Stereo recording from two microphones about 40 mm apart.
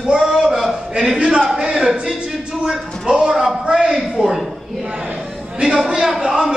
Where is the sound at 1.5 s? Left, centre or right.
Centre.